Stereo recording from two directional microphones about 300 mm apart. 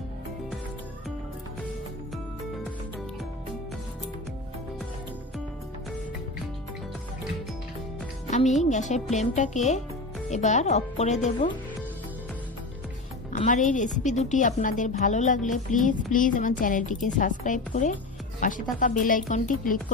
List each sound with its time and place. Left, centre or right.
8.3 s a woman's voice: left
13.3 s a woman's voice: left